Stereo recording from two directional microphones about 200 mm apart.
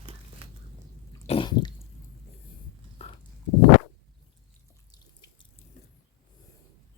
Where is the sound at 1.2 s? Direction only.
30° left (ahead or behind).